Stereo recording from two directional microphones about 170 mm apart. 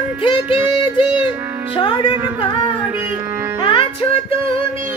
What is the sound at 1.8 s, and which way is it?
Music, 30° left (ahead or behind).